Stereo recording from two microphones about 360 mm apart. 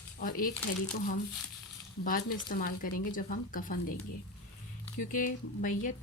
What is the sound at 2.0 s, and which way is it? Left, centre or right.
A woman's voice, left.